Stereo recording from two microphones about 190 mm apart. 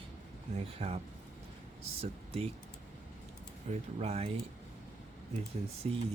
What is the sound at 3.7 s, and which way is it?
Speech, 35° right (ahead or behind).